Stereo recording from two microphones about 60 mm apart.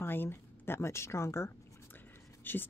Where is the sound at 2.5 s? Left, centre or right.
Left.